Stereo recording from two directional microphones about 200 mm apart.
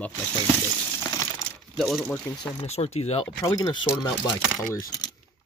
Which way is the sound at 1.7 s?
Centre (ahead or behind).